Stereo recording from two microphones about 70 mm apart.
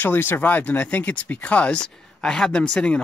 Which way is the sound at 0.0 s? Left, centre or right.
Left.